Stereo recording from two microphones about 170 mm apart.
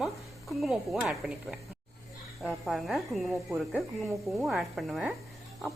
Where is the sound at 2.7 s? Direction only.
Centre (ahead or behind).